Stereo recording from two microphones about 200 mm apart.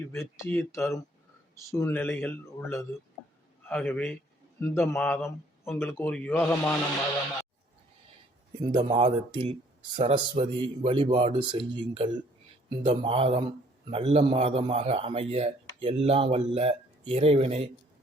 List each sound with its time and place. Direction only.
0.1 s a man's voice: 10° left (ahead or behind)
8.7 s a man's voice: 30° right (ahead or behind)